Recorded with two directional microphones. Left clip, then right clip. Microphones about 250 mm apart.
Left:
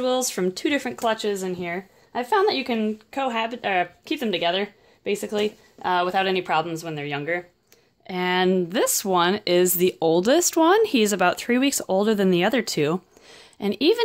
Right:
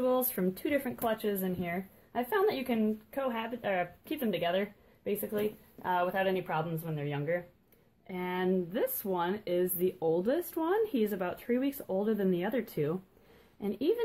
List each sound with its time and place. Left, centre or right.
0.0 s speech: left